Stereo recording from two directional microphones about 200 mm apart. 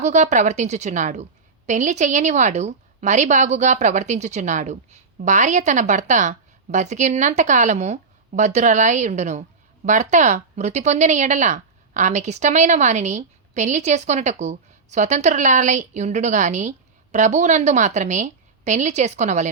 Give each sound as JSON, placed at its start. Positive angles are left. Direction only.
{"t": 0.0, "sound": "speech", "side_deg": -35}